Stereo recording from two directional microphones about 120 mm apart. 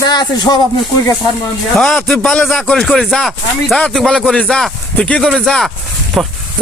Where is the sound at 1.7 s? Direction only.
5° left (ahead or behind).